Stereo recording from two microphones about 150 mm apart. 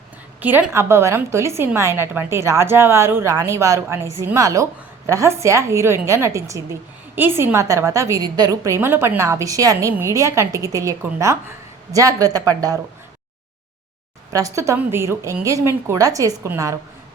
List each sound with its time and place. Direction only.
0.4 s a woman's voice: 10° right (ahead or behind)
14.3 s a woman's voice: 20° right (ahead or behind)